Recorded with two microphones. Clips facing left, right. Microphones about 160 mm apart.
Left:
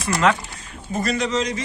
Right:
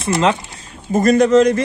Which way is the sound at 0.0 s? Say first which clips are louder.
Right 3 dB; 20° right (ahead or behind).